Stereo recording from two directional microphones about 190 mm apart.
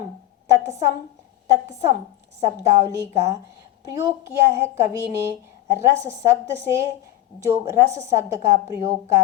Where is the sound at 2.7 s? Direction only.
15° right (ahead or behind).